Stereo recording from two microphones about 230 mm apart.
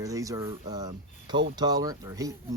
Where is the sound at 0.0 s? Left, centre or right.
Centre.